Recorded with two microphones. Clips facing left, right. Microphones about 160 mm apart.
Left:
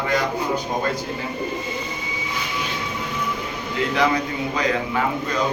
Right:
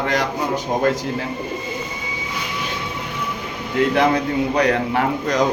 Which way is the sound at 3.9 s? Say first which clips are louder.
Right 1 dB; 55° right (ahead or behind).